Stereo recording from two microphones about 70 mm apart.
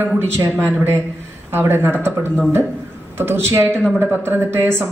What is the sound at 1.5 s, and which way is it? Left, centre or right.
Speech, right.